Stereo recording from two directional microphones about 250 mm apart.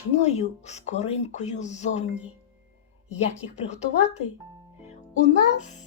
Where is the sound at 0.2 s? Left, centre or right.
Left.